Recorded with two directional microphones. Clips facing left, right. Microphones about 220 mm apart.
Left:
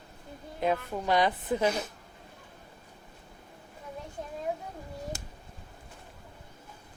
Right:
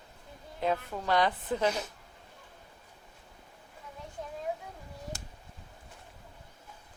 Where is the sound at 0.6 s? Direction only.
15° left (ahead or behind).